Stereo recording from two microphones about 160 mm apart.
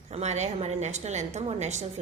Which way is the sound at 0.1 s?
45° right (ahead or behind).